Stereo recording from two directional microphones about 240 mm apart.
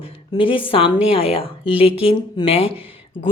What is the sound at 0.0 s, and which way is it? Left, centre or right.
A woman's voice, left.